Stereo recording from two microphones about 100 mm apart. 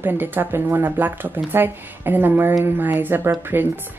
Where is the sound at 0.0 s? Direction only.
20° right (ahead or behind).